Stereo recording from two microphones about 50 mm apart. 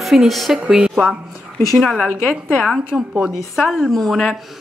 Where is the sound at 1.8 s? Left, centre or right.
Centre.